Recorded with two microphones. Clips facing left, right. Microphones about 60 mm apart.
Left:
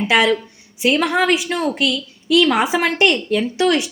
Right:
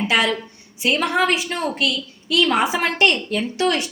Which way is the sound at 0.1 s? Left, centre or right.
Left.